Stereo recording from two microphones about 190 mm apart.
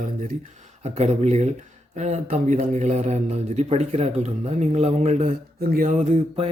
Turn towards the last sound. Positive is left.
turn(degrees=-35)  # may be behind; listen again after turning